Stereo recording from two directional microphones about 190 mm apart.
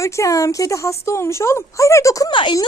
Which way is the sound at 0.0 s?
15° left (ahead or behind).